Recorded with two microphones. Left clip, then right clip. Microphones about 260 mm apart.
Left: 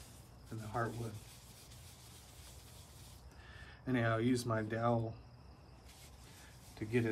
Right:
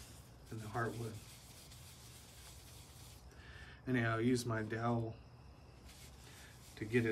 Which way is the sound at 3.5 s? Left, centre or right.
Centre.